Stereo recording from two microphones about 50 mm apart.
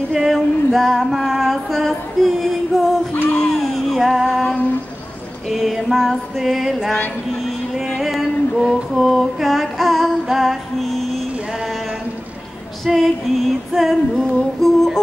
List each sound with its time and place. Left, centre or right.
0.1 s female singing: centre
3.2 s a sound: left
3.5 s a sound: centre
4.3 s female singing: centre
5.5 s female singing: centre
7.4 s music: centre
8.5 s female singing: centre
12.8 s female singing: centre